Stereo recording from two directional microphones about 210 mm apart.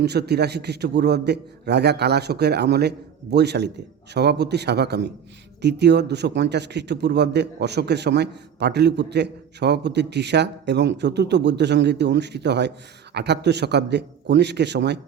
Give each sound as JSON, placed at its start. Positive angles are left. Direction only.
{"t": 0.0, "sound": "a man's voice", "side_deg": -50}